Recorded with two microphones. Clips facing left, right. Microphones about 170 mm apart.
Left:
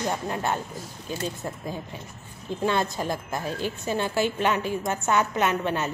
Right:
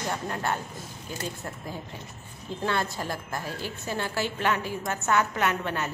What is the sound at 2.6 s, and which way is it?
A woman's voice, 20° left (ahead or behind).